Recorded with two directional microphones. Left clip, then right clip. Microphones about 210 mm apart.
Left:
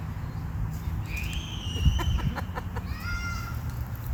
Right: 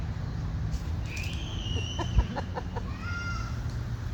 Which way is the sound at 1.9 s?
50° left (ahead or behind).